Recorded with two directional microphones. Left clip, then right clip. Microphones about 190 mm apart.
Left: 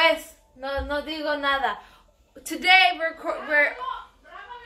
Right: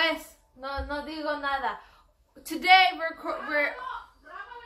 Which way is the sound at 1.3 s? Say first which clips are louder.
Left 5 dB; 30° left (ahead or behind).